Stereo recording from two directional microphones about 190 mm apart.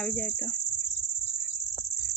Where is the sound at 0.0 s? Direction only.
5° left (ahead or behind).